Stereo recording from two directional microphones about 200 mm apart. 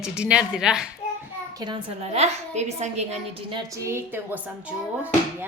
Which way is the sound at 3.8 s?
10° right (ahead or behind).